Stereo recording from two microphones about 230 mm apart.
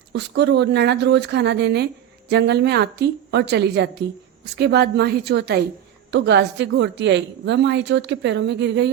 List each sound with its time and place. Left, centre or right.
0.1 s a woman's voice: right